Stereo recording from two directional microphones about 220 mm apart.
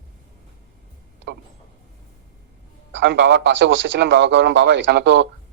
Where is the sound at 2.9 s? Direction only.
55° right (ahead or behind).